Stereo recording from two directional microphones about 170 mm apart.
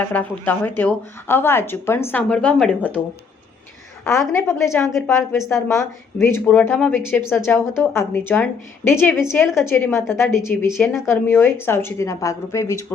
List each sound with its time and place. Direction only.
0.0 s a woman's voice: 10° left (ahead or behind)
4.0 s a woman's voice: 15° left (ahead or behind)